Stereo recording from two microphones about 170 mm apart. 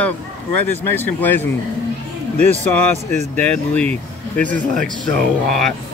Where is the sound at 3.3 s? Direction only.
10° left (ahead or behind).